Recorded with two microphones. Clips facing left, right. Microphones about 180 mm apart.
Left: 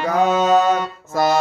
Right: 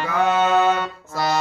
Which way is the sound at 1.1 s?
50° left (ahead or behind).